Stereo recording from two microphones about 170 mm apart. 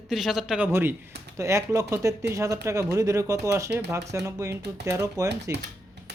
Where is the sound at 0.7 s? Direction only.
15° right (ahead or behind).